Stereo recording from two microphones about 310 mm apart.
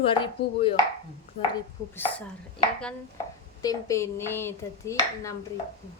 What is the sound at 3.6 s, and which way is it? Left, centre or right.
Speech, centre.